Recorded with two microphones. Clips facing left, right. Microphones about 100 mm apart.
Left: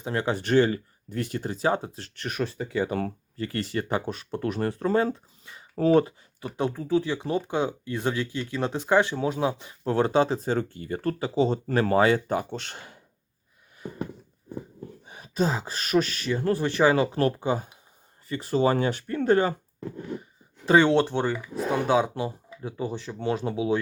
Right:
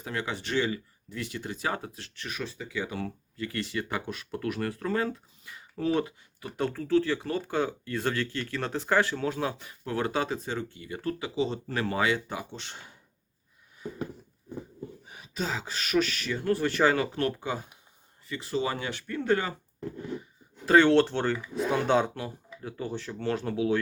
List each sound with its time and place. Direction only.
0.0 s speech: 35° left (ahead or behind)
2.1 s speech: 55° left (ahead or behind); by 6.5 s 35° left (ahead or behind)
6.6 s speech: 15° left (ahead or behind)
9.8 s speech: 30° left (ahead or behind); by 12.8 s 60° left (ahead or behind)
15.0 s speech: 35° left (ahead or behind)
18.3 s speech: 40° left (ahead or behind)
20.7 s speech: 15° left (ahead or behind)
22.1 s speech: 20° left (ahead or behind)